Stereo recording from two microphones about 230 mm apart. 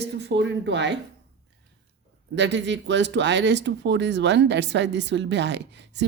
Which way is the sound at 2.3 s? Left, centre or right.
Right.